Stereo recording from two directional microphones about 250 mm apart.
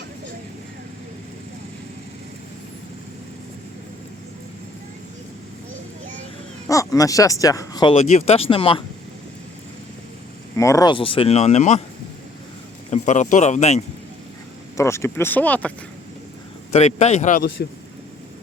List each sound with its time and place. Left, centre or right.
6.7 s speech: centre
10.6 s speech: centre
12.9 s speech: left
14.8 s speech: centre
16.7 s speech: left